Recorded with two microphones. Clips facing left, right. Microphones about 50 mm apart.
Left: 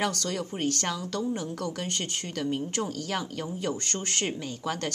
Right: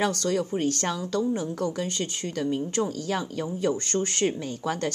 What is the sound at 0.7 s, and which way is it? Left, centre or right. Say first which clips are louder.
Speech: right 4 dB; right.